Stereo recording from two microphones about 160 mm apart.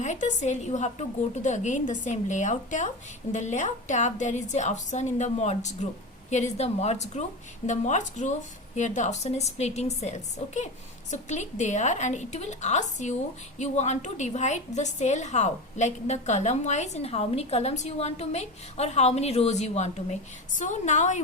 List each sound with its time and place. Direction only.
0.0 s a woman's voice: 50° left (ahead or behind)